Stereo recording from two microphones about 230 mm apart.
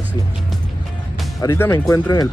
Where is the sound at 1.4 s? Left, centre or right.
Centre.